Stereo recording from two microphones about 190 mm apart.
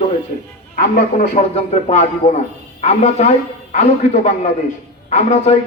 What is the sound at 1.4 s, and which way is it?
A man's voice, 35° left (ahead or behind).